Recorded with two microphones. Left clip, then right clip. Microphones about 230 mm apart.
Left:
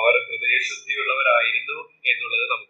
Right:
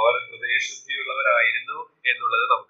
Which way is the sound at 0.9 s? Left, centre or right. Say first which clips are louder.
Left 3 dB; right.